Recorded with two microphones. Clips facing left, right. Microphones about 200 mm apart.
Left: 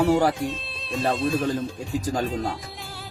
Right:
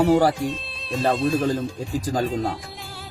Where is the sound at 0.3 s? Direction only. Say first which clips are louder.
Right 2 dB; centre (ahead or behind).